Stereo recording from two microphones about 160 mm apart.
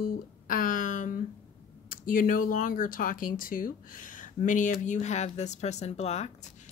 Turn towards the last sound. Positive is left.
turn(degrees=45)  # may be behind; listen again after turning